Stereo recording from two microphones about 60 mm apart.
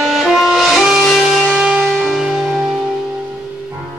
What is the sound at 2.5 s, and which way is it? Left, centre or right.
Music, centre.